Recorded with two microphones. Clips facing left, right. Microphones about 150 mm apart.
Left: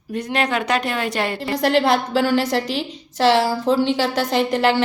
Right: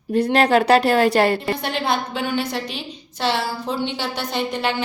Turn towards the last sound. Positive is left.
turn(degrees=90)